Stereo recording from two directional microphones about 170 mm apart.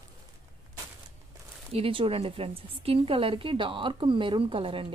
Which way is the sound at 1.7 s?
30° right (ahead or behind).